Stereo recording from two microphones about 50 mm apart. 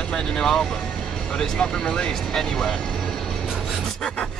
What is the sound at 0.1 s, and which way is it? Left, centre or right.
Speech, centre.